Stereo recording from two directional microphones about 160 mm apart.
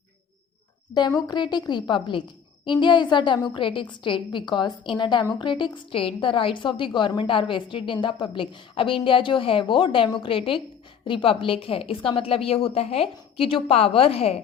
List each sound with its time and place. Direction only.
1.3 s a woman's voice: 25° left (ahead or behind)